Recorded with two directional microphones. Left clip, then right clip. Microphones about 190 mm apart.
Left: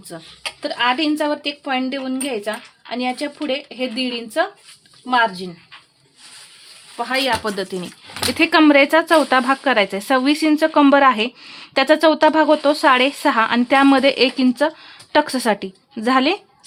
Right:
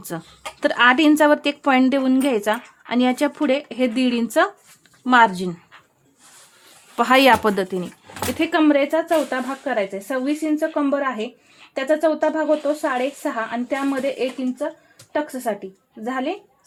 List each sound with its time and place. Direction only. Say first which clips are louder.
0.1 s speech: left 2 dB; 40° right (ahead or behind)
6.9 s speech: right 6 dB; 45° right (ahead or behind)
7.4 s speech: right 3 dB; 20° right (ahead or behind)
8.3 s speech: left 5 dB; 5° left (ahead or behind); by 16.3 s 40° left (ahead or behind)